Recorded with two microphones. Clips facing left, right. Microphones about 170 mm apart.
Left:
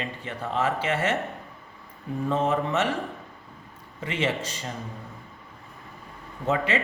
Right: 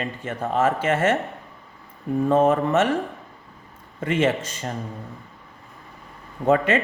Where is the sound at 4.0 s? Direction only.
50° right (ahead or behind).